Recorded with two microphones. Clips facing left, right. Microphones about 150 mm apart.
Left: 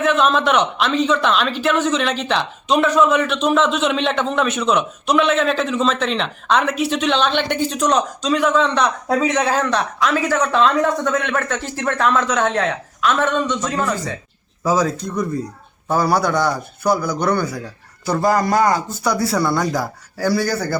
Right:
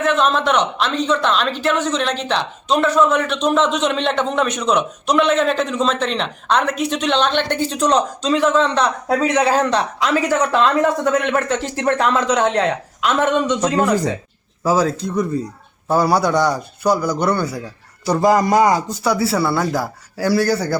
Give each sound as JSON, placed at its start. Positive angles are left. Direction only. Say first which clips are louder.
{"t": 0.0, "sound": "speech", "louder": "left 1 dB", "side_deg": 5}
{"t": 8.8, "sound": "a man's voice", "louder": "even", "side_deg": -5}
{"t": 15.9, "sound": "a man's voice", "louder": "right 2 dB", "side_deg": -10}
{"t": 19.0, "sound": "a man's voice", "louder": "right 1 dB", "side_deg": -5}